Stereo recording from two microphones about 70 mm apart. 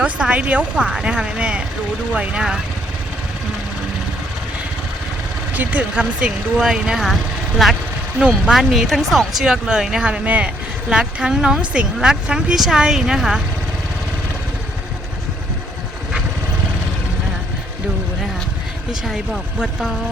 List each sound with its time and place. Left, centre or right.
0.0 s speech: centre
5.5 s speech: centre
19.0 s speech: centre